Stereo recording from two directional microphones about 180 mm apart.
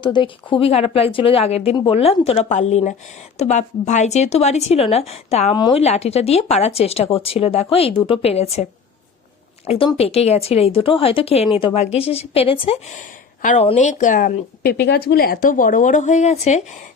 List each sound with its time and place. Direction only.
0.0 s a woman's voice: 25° left (ahead or behind)
5.5 s speech: 25° left (ahead or behind)
5.8 s a woman's voice: 35° left (ahead or behind)
9.6 s a woman's voice: 30° left (ahead or behind)